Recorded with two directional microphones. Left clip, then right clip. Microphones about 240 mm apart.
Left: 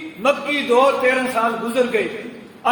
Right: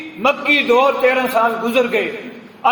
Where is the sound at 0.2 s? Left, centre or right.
Centre.